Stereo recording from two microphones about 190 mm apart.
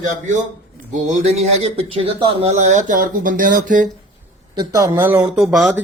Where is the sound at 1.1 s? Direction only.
35° right (ahead or behind).